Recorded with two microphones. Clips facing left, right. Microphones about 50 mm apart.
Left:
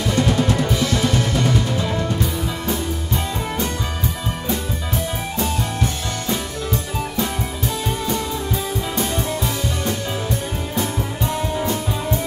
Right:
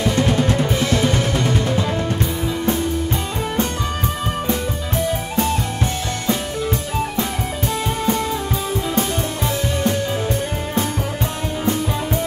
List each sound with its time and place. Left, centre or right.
0.0 s drum: right
0.8 s drum kit: right
1.6 s music: right